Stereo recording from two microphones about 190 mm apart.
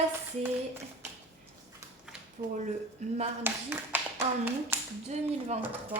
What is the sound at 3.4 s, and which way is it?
Speech, 10° right (ahead or behind).